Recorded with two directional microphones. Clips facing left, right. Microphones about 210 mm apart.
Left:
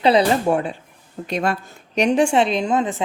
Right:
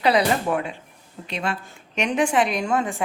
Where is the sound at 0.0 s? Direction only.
25° left (ahead or behind).